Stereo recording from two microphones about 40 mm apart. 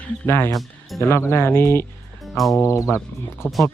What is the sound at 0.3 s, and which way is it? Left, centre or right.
Speech, left.